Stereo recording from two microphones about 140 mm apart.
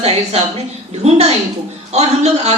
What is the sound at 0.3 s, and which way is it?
A woman's voice, 50° right (ahead or behind).